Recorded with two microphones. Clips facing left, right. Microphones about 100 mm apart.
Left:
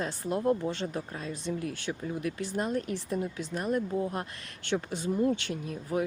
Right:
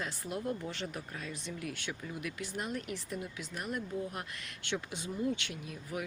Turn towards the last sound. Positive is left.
turn(degrees=35)  # may be behind; listen again after turning